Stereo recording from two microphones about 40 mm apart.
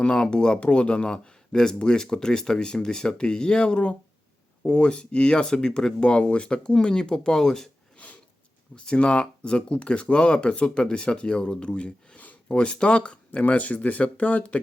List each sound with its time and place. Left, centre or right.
0.0 s speech: left
6.7 s speech: centre
7.9 s a sound: left
8.7 s speech: left
13.4 s speech: left